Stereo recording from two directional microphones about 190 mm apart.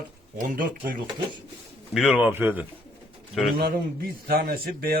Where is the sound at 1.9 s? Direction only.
5° right (ahead or behind).